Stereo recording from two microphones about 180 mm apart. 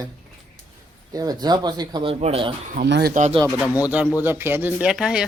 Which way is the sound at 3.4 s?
20° left (ahead or behind).